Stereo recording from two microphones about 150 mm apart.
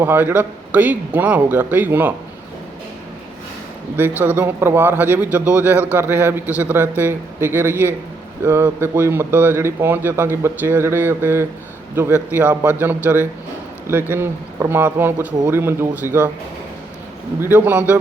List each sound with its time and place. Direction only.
0.0 s speech: 15° right (ahead or behind)
3.9 s speech: 15° right (ahead or behind)
17.4 s speech: 15° right (ahead or behind)